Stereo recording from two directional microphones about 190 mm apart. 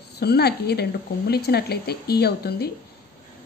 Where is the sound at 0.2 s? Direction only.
55° left (ahead or behind).